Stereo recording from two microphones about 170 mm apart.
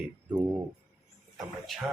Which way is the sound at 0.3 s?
10° right (ahead or behind).